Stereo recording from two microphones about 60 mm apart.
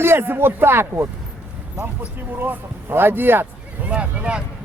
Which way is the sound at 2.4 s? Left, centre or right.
Right.